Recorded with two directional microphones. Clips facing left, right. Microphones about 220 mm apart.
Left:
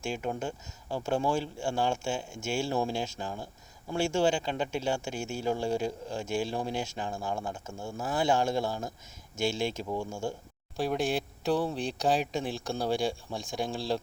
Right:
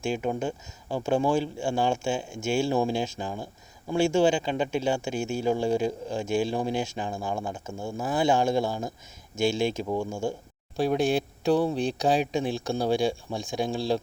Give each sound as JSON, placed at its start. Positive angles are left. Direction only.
{"t": 0.1, "sound": "speech", "side_deg": -20}